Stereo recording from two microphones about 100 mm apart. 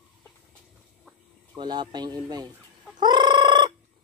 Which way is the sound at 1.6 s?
50° right (ahead or behind).